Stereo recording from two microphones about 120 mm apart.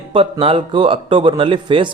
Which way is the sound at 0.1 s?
45° right (ahead or behind).